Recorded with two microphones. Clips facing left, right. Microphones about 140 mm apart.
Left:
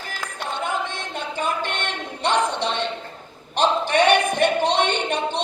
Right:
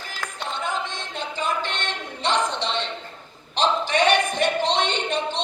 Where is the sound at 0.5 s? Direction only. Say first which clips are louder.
Left 3 dB; 55° left (ahead or behind).